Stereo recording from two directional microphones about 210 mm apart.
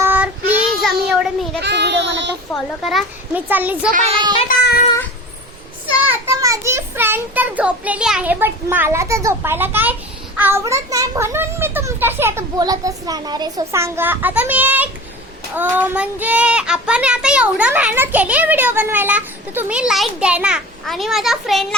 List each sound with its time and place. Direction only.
0.0 s child singing: 10° right (ahead or behind)
1.6 s child singing: 55° right (ahead or behind)
2.8 s child singing: 5° right (ahead or behind)
4.4 s child singing: 45° left (ahead or behind)
6.1 s child singing: 15° right (ahead or behind)